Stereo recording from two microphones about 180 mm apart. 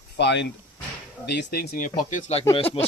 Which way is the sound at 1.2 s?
70° left (ahead or behind).